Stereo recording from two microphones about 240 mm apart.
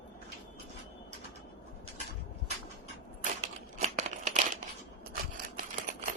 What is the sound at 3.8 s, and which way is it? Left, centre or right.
Crumpling, right.